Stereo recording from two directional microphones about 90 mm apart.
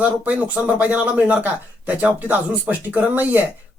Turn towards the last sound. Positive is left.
turn(degrees=-20)  # may be behind; listen again after turning